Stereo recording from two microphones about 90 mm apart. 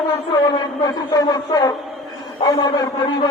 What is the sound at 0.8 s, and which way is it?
A man's voice, 45° left (ahead or behind).